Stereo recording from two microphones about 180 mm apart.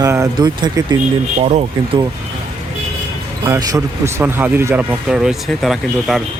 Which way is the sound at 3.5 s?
15° right (ahead or behind).